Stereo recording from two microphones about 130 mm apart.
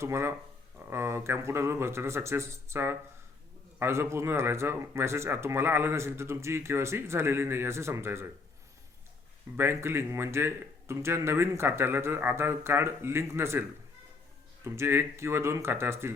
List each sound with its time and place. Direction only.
0.0 s speech: 20° right (ahead or behind)
9.6 s speech: 20° right (ahead or behind)